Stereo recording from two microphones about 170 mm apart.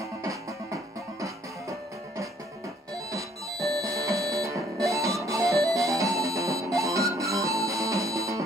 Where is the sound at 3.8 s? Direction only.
20° right (ahead or behind).